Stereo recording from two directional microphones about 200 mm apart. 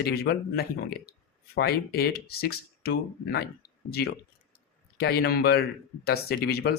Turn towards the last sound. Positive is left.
turn(degrees=55)  # may be behind; listen again after turning